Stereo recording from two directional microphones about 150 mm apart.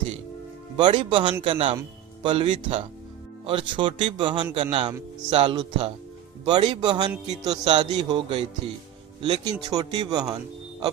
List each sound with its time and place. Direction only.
0.8 s speech: 30° right (ahead or behind)
9.2 s speech: 30° right (ahead or behind)